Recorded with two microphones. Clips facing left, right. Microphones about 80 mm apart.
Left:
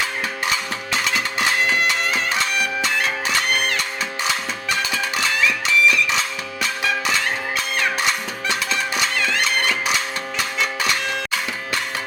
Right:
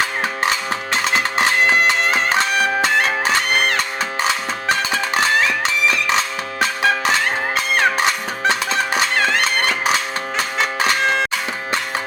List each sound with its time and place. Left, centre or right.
1.1 s bagpipes: right
4.7 s music: right